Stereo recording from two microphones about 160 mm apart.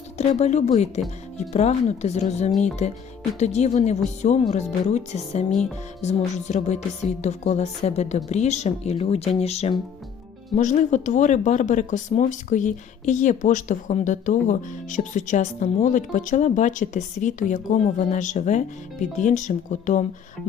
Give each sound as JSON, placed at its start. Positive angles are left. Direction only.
{"t": 0.2, "sound": "speech", "side_deg": 45}